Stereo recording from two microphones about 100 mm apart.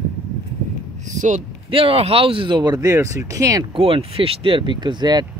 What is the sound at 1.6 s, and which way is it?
Speech, 65° right (ahead or behind).